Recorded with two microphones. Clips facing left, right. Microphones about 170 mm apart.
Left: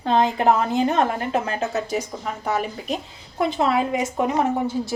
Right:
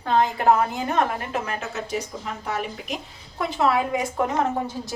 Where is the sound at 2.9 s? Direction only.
25° left (ahead or behind).